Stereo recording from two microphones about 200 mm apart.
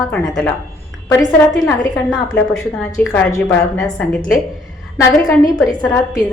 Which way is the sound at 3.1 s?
10° left (ahead or behind).